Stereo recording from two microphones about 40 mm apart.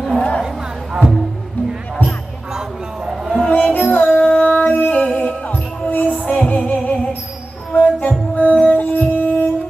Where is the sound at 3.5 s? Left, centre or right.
Left.